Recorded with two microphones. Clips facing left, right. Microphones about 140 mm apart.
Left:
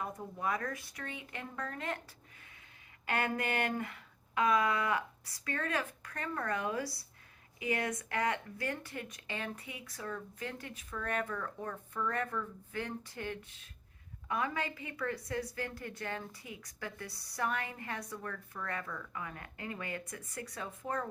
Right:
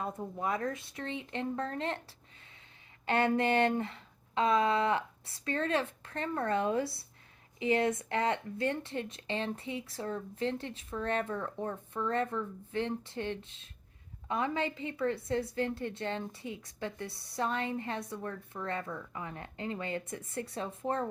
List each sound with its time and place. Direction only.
0.0 s a woman's voice: 25° right (ahead or behind)